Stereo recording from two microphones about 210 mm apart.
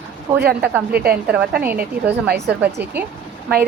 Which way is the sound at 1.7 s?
50° right (ahead or behind).